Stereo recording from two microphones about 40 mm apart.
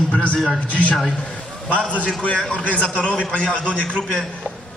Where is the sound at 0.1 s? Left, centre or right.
Left.